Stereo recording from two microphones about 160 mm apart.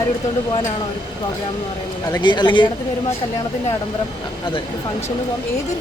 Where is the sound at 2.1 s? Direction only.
25° left (ahead or behind).